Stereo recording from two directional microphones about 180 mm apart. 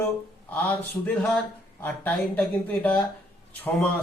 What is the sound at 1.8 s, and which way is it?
A man's voice, 10° left (ahead or behind).